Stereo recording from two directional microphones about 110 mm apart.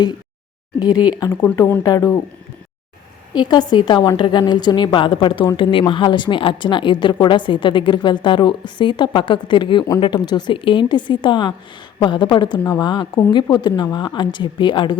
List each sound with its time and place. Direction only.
0.8 s a woman's voice: 40° left (ahead or behind)
1.3 s a woman's voice: 15° left (ahead or behind)
3.3 s a woman's voice: 40° left (ahead or behind)